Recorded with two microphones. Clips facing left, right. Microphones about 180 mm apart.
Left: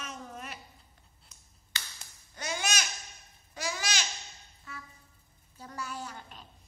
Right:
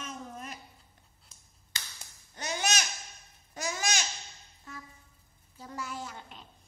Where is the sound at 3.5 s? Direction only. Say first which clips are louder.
Right 1 dB; 45° right (ahead or behind).